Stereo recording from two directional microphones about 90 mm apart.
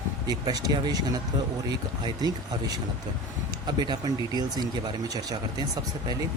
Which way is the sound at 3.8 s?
50° right (ahead or behind).